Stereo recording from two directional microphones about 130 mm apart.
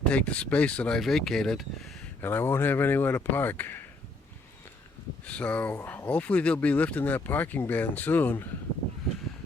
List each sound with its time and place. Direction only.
0.0 s speech: 10° left (ahead or behind)
2.2 s speech: 15° left (ahead or behind)
5.2 s speech: 10° left (ahead or behind)